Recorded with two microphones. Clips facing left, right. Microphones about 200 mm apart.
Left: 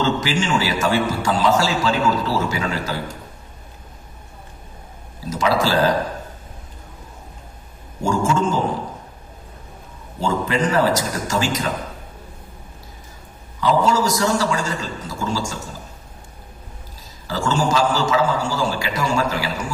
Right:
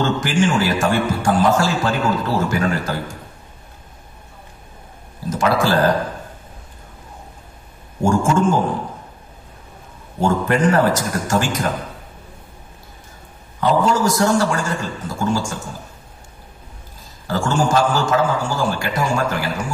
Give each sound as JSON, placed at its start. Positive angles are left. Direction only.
{"t": 0.0, "sound": "a man's voice", "side_deg": -55}
{"t": 5.3, "sound": "speech", "side_deg": -55}
{"t": 8.0, "sound": "a man's voice", "side_deg": -55}
{"t": 10.2, "sound": "a man's voice", "side_deg": -55}
{"t": 13.6, "sound": "a man's voice", "side_deg": -55}
{"t": 17.3, "sound": "a man's voice", "side_deg": -55}